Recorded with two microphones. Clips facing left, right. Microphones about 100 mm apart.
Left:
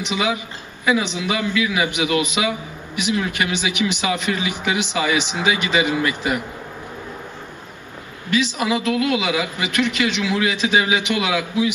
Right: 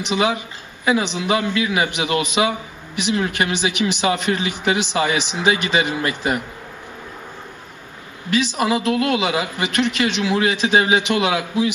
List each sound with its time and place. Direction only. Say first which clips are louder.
0.1 s a man's voice: right 3 dB; 35° right (ahead or behind)
8.9 s a man's voice: right 1 dB; 35° right (ahead or behind)